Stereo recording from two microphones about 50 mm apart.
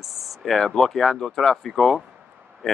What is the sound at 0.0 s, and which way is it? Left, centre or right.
Speech, centre.